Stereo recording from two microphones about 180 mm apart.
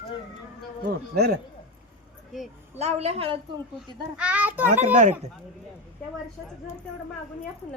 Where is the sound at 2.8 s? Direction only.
35° right (ahead or behind).